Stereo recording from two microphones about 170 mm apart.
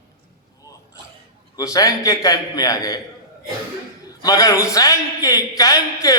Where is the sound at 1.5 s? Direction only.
20° left (ahead or behind).